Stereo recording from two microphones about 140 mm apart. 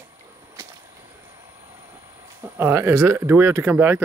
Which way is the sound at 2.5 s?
15° right (ahead or behind).